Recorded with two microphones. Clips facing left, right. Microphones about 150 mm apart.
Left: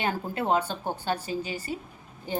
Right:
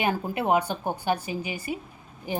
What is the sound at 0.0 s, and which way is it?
A woman's voice, 15° right (ahead or behind).